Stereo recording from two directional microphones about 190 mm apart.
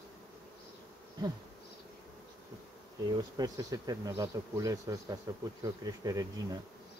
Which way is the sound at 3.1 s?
20° right (ahead or behind).